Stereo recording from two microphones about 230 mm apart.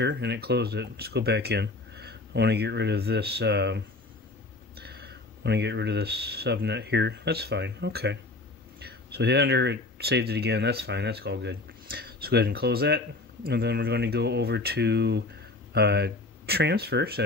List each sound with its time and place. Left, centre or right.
0.0 s speech: right